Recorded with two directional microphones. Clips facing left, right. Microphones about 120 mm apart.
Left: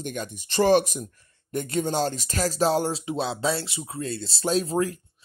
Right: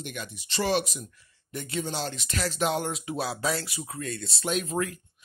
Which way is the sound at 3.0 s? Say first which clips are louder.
Left 3 dB; 20° left (ahead or behind).